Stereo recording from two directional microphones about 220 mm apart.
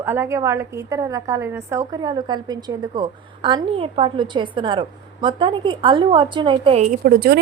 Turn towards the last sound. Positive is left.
turn(degrees=-45)  # may be behind; listen again after turning